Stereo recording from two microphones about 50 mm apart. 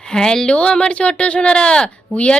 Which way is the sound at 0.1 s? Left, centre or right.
Centre.